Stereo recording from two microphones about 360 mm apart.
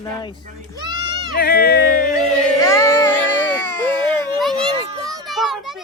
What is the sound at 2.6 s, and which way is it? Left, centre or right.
Music, centre.